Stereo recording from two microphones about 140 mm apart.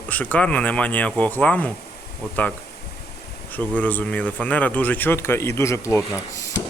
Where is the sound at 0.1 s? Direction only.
10° left (ahead or behind).